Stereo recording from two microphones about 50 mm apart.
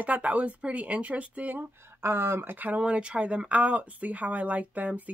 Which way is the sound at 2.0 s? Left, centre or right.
Right.